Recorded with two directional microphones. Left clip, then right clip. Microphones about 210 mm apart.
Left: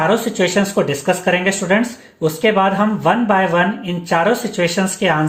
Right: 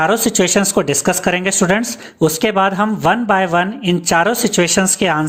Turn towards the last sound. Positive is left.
turn(degrees=-45)  # may be behind; listen again after turning